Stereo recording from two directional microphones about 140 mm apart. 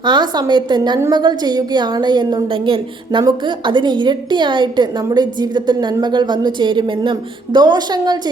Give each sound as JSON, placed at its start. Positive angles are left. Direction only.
{"t": 0.0, "sound": "a woman's voice", "side_deg": -30}
{"t": 0.9, "sound": "a woman's voice", "side_deg": -20}
{"t": 1.2, "sound": "a woman's voice", "side_deg": -30}